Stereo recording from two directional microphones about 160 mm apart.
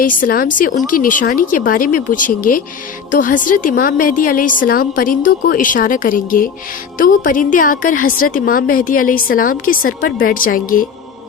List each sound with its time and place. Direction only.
0.0 s a woman's voice: 60° left (ahead or behind)